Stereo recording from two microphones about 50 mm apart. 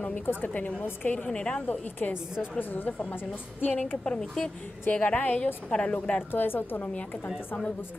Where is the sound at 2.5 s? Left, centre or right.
Left.